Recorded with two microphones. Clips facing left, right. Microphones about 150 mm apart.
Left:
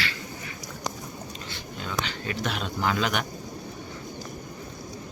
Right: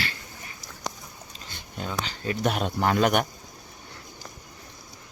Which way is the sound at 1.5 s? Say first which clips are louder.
Right 3 dB; 35° right (ahead or behind).